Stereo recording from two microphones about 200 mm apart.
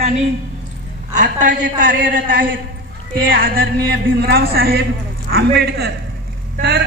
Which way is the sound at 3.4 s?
50° right (ahead or behind).